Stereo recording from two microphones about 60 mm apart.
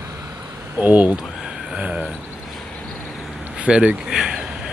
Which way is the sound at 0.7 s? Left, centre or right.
Right.